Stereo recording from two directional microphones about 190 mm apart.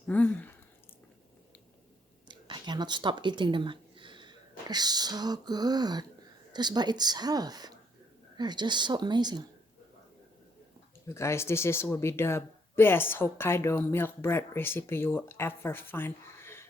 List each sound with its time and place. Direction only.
0.1 s speech: 10° left (ahead or behind)
2.2 s speech: 25° right (ahead or behind)
11.0 s speech: 15° left (ahead or behind)